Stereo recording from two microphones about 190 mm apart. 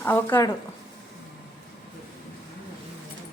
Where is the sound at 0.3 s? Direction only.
20° left (ahead or behind).